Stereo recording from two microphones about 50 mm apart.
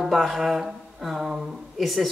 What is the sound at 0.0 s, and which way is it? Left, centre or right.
A man's voice, centre.